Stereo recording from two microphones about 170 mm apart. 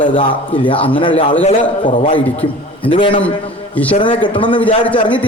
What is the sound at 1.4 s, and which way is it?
A man's voice, 40° left (ahead or behind).